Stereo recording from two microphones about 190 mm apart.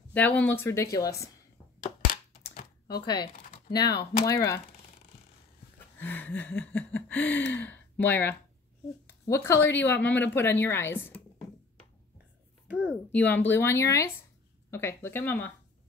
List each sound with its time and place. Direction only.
0.1 s speech: 10° left (ahead or behind)
3.3 s a sound: 45° left (ahead or behind)
3.8 s speech: 55° left (ahead or behind)
4.3 s speech: 15° left (ahead or behind)
5.9 s speech: 10° left (ahead or behind)
12.6 s a sound: 10° right (ahead or behind)
13.1 s speech: 10° left (ahead or behind)